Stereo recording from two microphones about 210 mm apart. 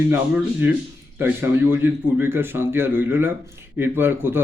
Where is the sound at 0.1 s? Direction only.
10° right (ahead or behind).